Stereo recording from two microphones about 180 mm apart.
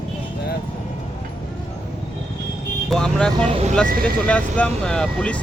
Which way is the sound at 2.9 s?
5° left (ahead or behind).